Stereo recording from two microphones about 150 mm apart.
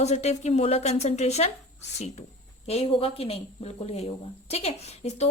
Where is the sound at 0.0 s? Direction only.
50° left (ahead or behind).